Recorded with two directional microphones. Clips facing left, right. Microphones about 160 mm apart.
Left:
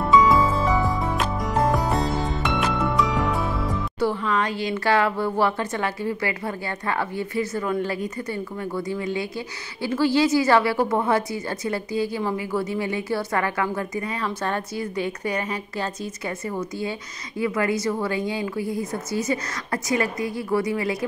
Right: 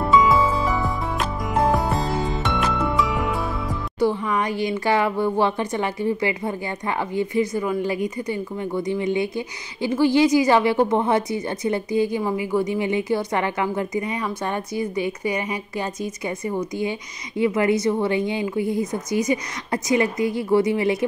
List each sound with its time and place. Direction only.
0.2 s music: centre (ahead or behind)
4.0 s a woman's voice: 15° right (ahead or behind)